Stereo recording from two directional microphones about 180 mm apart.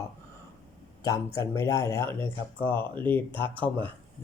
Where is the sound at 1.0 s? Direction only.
20° left (ahead or behind).